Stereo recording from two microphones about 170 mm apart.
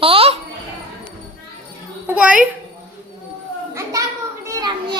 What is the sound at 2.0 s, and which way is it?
Speech, 10° right (ahead or behind).